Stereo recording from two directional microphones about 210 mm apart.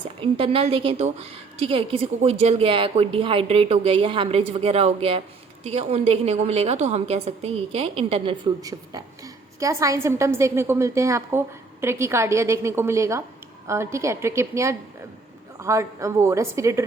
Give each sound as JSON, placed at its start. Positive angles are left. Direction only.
{"t": 0.2, "sound": "a woman's voice", "side_deg": -25}